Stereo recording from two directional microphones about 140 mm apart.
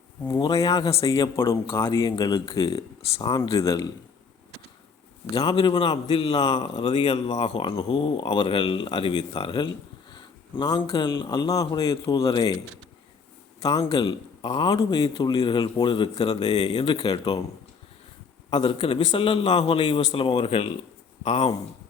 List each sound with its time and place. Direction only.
0.3 s speech: 30° left (ahead or behind)
5.3 s speech: 30° left (ahead or behind)
13.8 s speech: 40° left (ahead or behind)
18.7 s a man's voice: 35° left (ahead or behind)